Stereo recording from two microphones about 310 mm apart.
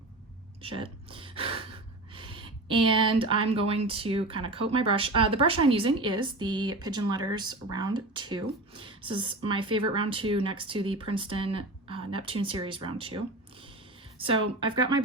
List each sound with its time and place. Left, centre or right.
0.6 s speech: centre
14.2 s speech: centre